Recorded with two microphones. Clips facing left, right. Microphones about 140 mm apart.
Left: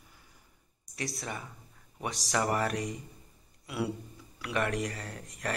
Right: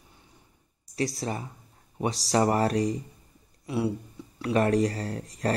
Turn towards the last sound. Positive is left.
turn(degrees=-35)  # may be behind; listen again after turning